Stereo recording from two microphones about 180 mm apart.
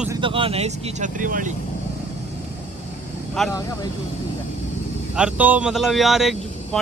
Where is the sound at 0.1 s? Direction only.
30° right (ahead or behind); by 1.5 s 45° right (ahead or behind).